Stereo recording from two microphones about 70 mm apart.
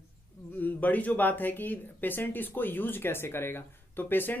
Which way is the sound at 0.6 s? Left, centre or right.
Left.